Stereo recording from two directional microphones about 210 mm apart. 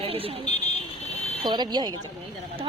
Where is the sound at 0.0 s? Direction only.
25° right (ahead or behind).